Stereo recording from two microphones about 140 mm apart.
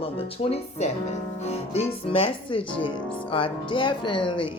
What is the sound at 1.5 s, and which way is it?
Speech, 45° left (ahead or behind).